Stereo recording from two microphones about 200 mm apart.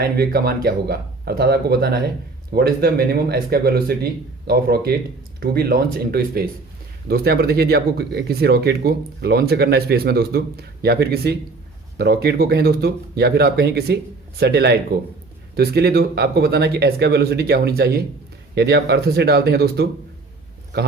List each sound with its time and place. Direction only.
0.0 s speech: 50° right (ahead or behind)